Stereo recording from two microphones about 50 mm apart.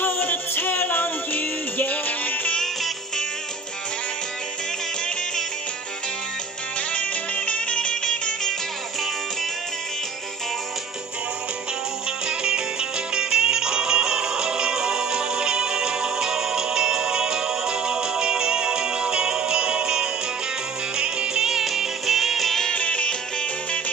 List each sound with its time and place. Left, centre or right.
0.0 s music: left
2.5 s music: centre
6.9 s music: left
12.3 s music: centre
22.8 s music: left